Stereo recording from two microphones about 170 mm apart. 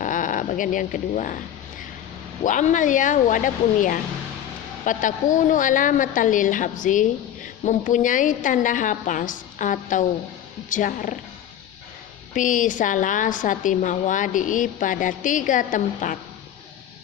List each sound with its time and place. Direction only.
0.0 s speech: 50° left (ahead or behind)
2.4 s a woman's voice: 50° left (ahead or behind)
12.3 s a woman's voice: 50° left (ahead or behind)